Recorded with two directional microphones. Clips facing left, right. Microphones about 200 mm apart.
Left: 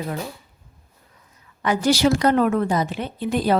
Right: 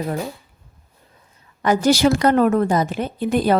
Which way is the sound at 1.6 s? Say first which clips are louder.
Right 3 dB; 45° right (ahead or behind).